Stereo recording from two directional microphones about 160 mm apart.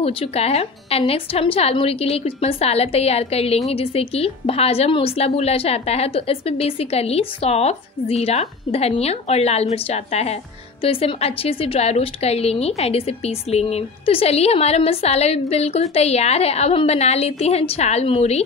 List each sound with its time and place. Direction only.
0.0 s a woman's voice: 40° left (ahead or behind)